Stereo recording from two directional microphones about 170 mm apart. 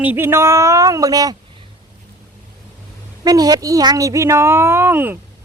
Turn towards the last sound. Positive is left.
turn(degrees=-10)  # may be behind; listen again after turning